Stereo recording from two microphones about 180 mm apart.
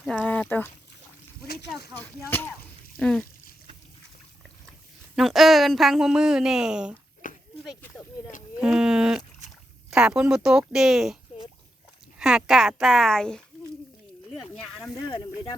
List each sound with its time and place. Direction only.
0.1 s speech: 5° left (ahead or behind)
3.0 s speech: centre (ahead or behind)
5.1 s speech: centre (ahead or behind)
7.2 s walk: 45° left (ahead or behind)
8.6 s speech: 5° right (ahead or behind)
12.2 s speech: centre (ahead or behind)
14.3 s a sound: centre (ahead or behind)